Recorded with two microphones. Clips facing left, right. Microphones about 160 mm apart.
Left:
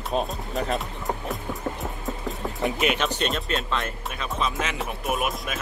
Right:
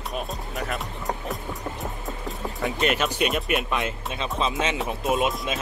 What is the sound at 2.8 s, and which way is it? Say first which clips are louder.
Speech: right 3 dB; centre (ahead or behind).